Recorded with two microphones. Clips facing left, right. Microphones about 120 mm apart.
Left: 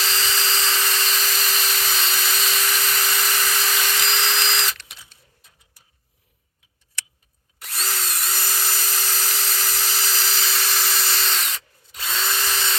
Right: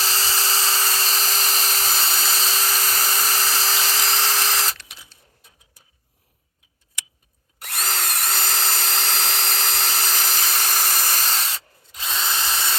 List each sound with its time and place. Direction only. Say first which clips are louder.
0.0 s dental drill: even; 35° right (ahead or behind)
7.6 s drill: right 2 dB; 55° right (ahead or behind); by 11.6 s 35° right (ahead or behind)
11.9 s drill: even; 15° right (ahead or behind)